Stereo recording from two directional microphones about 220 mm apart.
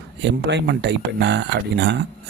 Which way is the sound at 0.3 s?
50° right (ahead or behind).